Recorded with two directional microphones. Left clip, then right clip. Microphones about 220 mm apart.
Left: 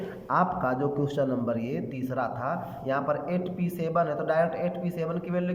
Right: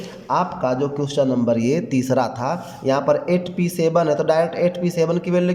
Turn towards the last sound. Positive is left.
turn(degrees=-20)  # may be behind; listen again after turning